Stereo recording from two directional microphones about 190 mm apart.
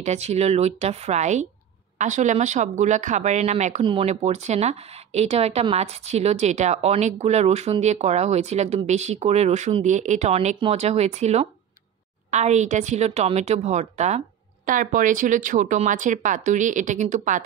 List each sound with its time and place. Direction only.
0.0 s speech: 35° right (ahead or behind)